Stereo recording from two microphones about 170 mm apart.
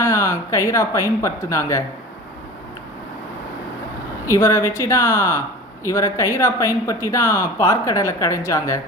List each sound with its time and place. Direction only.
0.0 s speech: 15° left (ahead or behind)
4.3 s speech: 20° left (ahead or behind)